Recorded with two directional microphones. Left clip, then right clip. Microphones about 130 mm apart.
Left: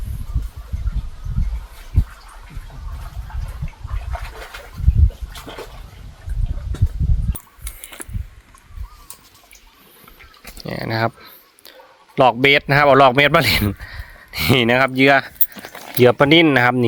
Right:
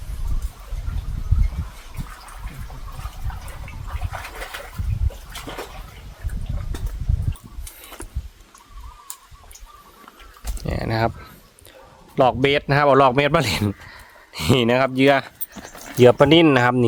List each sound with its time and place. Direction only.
10.6 s a sound: 20° right (ahead or behind)
12.1 s a man's voice: centre (ahead or behind)
16.0 s speech: 20° right (ahead or behind)